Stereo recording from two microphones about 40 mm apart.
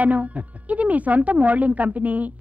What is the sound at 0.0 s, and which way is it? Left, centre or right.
Speech, right.